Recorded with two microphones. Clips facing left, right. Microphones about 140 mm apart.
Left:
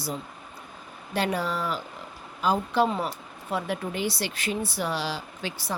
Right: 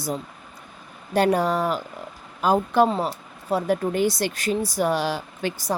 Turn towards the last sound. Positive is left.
turn(degrees=-50)  # may be behind; listen again after turning